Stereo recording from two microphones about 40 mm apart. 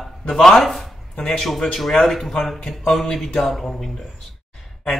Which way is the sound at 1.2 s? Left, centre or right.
Centre.